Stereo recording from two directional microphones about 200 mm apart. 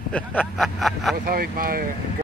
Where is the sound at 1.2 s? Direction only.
45° right (ahead or behind).